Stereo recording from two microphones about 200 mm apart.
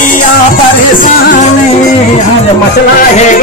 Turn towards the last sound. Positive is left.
turn(degrees=35)  # may be behind; listen again after turning